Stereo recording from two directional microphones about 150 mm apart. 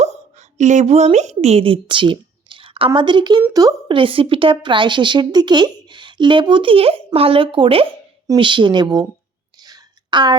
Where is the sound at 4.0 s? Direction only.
35° right (ahead or behind).